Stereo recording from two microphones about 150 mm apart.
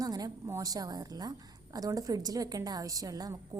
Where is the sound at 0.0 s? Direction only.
25° right (ahead or behind).